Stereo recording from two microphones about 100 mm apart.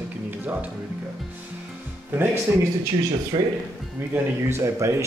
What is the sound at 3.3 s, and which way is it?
Speech, 50° right (ahead or behind).